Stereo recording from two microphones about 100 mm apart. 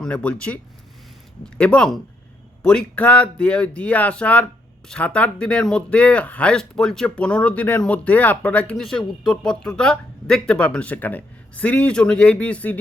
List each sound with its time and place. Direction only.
0.0 s speech: 10° left (ahead or behind)